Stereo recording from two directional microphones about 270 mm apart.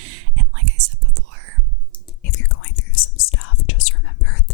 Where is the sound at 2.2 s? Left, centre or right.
Left.